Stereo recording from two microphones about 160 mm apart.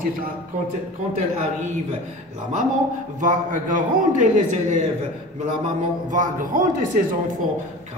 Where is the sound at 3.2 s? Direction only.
55° right (ahead or behind).